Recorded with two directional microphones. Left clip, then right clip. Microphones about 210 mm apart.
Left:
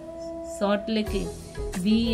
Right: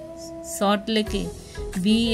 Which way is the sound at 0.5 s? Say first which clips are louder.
Right 4 dB; 55° right (ahead or behind).